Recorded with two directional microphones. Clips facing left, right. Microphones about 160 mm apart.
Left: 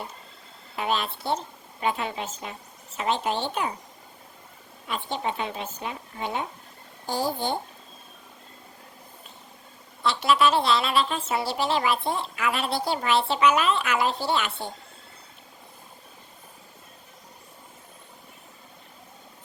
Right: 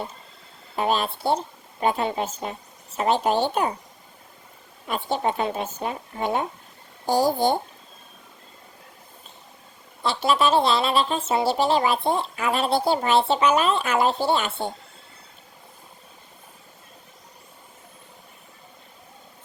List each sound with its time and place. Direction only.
0.8 s a woman's voice: 35° right (ahead or behind)
4.9 s a woman's voice: 45° right (ahead or behind)
10.0 s a woman's voice: 30° right (ahead or behind)